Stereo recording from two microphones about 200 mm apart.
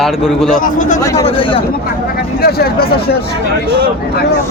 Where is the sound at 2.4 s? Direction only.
50° left (ahead or behind).